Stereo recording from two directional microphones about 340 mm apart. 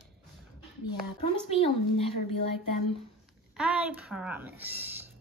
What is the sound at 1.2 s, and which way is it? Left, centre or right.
Speech, centre.